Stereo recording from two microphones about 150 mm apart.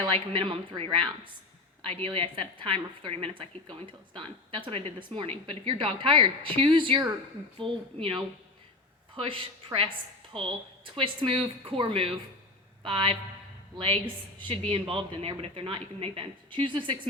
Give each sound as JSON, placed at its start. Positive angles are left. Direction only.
{"t": 0.0, "sound": "a woman's voice", "side_deg": -35}
{"t": 10.3, "sound": "a woman's voice", "side_deg": -35}